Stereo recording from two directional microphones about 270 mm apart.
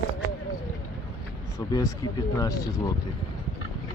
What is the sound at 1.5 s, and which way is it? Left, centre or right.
Speech, centre.